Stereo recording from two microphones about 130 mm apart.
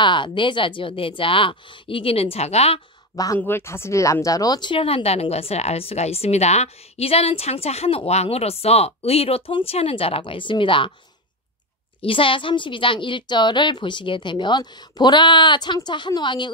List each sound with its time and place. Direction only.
0.0 s a woman's voice: 40° left (ahead or behind); by 2.8 s 55° left (ahead or behind)
3.3 s speech: 15° left (ahead or behind); by 10.9 s 40° left (ahead or behind)
12.0 s a woman's voice: 45° left (ahead or behind)